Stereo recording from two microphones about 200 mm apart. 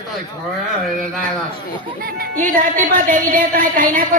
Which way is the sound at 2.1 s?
40° right (ahead or behind).